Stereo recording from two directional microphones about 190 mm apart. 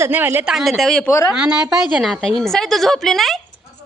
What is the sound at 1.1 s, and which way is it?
Speech, 15° left (ahead or behind).